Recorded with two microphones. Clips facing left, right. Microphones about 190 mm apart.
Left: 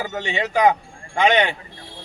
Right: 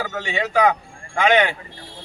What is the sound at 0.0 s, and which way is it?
A man's voice, 20° left (ahead or behind).